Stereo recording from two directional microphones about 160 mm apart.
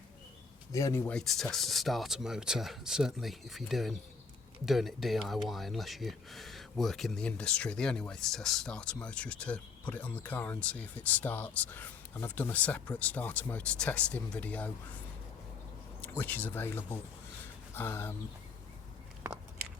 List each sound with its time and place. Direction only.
0.7 s speech: 20° left (ahead or behind)
1.0 s speech: 5° left (ahead or behind)
16.0 s speech: 10° left (ahead or behind)